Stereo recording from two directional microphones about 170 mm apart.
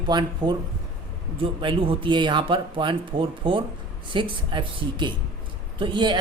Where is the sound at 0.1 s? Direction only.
25° right (ahead or behind).